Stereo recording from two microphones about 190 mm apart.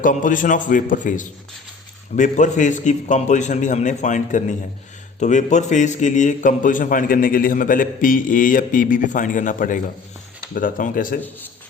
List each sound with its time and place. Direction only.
0.0 s a man's voice: 45° left (ahead or behind)